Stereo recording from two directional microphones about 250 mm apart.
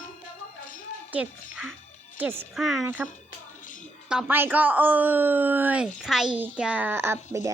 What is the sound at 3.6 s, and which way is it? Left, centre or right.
Music, left.